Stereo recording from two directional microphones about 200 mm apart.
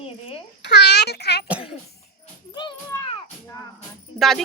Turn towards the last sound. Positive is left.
turn(degrees=0)  # may be behind; listen again after turning